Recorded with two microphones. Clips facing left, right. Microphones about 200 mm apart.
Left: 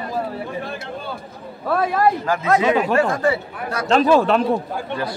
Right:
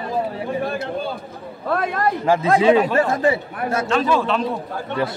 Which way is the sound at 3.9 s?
45° left (ahead or behind).